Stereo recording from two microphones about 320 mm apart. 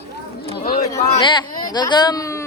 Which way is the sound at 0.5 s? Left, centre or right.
Left.